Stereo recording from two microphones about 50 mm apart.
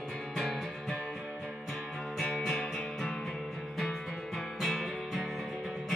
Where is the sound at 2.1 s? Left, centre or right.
Centre.